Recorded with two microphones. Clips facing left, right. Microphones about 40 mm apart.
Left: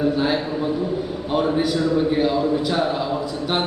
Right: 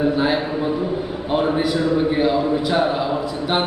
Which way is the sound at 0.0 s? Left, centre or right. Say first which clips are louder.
Right 2 dB; centre.